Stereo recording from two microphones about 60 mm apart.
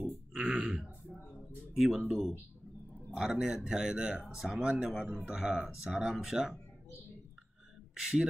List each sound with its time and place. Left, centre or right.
0.0 s burping: centre
1.8 s speech: centre
8.0 s speech: centre